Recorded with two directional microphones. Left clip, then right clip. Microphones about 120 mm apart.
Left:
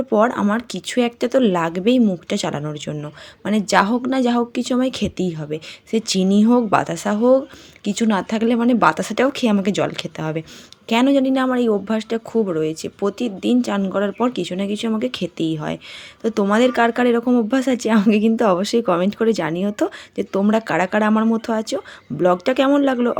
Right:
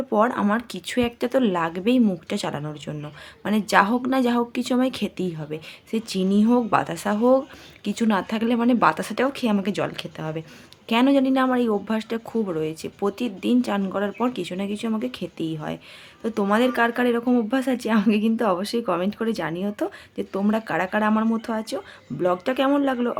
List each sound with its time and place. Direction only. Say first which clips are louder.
0.1 s a woman's voice: left 3 dB; 30° left (ahead or behind)
10.8 s a woman's voice: left 3 dB; 25° left (ahead or behind)